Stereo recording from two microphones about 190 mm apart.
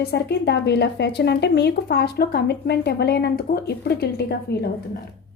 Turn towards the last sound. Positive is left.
turn(degrees=60)  # may be behind; listen again after turning